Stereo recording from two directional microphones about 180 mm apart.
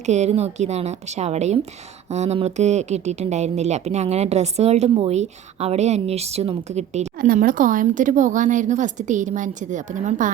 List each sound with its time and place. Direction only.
0.0 s a woman's voice: 40° right (ahead or behind)
7.2 s speech: 50° right (ahead or behind)